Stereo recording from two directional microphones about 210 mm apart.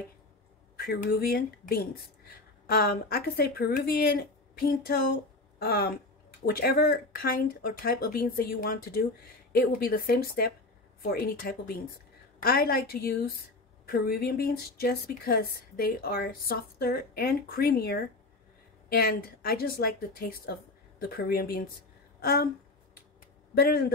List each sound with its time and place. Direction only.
0.7 s speech: 45° left (ahead or behind)
23.5 s speech: 45° left (ahead or behind)